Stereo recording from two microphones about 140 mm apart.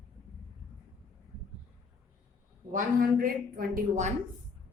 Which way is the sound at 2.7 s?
85° right.